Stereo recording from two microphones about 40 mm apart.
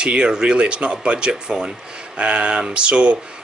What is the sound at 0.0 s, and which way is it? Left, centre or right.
Speech, right.